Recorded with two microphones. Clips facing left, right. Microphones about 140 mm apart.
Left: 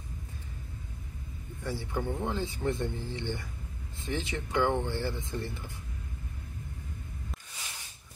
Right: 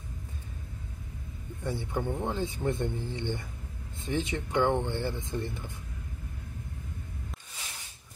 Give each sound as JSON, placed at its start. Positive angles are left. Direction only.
{"t": 1.6, "sound": "speech", "side_deg": -20}